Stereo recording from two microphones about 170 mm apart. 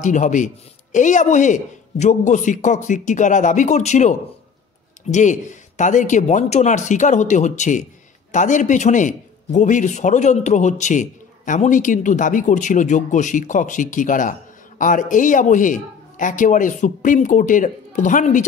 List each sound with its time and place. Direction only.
0.0 s a man's voice: 45° left (ahead or behind)